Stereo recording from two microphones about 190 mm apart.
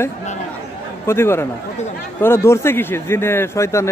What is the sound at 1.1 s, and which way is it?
Speech, 15° left (ahead or behind).